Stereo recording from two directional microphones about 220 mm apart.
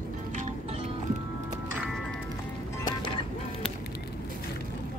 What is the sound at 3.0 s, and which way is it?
Music, 20° left (ahead or behind).